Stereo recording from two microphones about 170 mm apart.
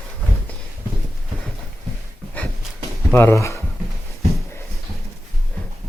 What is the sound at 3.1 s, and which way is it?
Speech, 15° left (ahead or behind).